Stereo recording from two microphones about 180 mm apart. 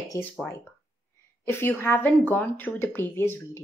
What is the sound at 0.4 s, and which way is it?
Speech, 10° left (ahead or behind).